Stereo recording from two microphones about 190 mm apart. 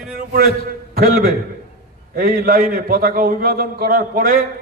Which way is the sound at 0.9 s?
50° right (ahead or behind).